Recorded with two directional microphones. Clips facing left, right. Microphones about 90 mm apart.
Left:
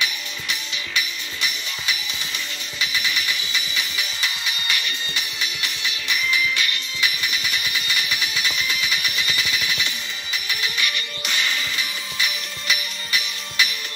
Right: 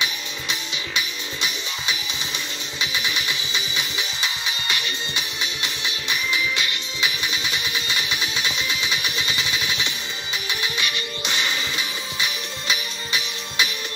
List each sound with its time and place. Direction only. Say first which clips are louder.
0.0 s music: even; 20° right (ahead or behind)